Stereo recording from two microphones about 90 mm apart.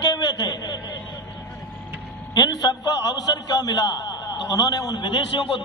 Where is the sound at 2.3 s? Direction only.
45° left (ahead or behind).